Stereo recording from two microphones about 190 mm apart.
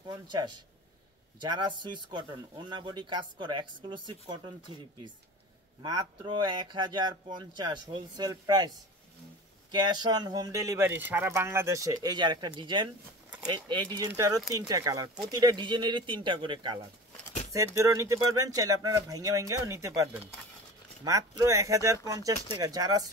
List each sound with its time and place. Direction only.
0.1 s speech: 25° right (ahead or behind)
5.8 s speech: 20° right (ahead or behind)